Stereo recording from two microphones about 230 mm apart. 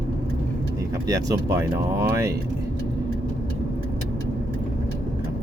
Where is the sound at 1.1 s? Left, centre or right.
Centre.